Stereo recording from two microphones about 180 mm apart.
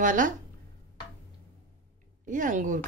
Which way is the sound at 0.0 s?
45° right (ahead or behind).